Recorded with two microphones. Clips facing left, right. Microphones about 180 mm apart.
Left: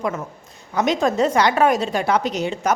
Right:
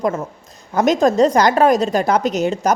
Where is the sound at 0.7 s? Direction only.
45° right (ahead or behind).